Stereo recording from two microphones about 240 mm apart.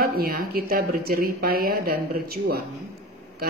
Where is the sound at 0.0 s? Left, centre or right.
Right.